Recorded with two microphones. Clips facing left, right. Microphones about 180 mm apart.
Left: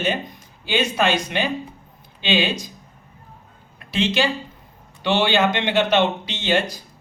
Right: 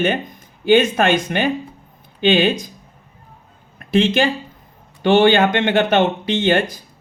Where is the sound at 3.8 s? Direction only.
50° right (ahead or behind).